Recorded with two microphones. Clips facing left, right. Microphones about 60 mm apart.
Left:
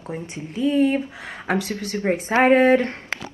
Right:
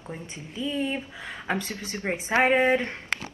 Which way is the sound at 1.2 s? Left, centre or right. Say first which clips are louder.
Left 5 dB; centre.